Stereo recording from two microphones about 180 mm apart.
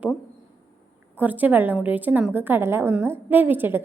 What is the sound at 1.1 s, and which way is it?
A woman's voice, 10° right (ahead or behind).